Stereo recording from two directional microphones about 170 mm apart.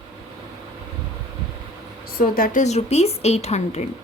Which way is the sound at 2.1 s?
55° left (ahead or behind).